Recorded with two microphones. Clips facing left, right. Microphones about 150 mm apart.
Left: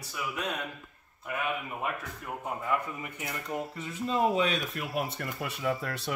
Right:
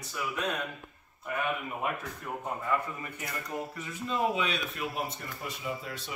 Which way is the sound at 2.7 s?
15° left (ahead or behind).